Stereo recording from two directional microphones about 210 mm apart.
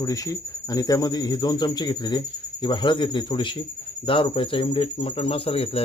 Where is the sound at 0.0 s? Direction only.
15° left (ahead or behind).